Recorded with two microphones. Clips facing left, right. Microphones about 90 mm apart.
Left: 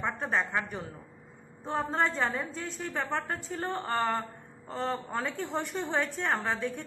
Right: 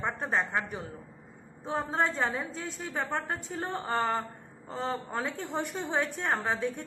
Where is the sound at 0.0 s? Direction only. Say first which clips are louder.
Even; 5° right (ahead or behind).